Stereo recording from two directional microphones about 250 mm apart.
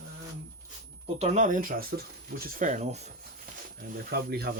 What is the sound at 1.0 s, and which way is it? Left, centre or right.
Speech, right.